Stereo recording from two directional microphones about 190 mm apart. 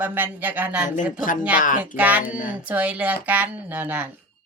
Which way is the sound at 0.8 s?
45° left (ahead or behind).